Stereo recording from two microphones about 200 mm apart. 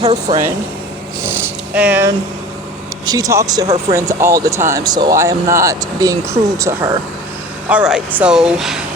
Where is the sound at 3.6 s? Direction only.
30° right (ahead or behind).